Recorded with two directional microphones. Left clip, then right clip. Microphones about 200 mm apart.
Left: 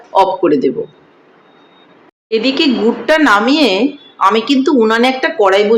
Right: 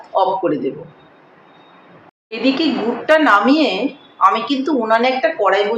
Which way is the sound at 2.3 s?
40° left (ahead or behind).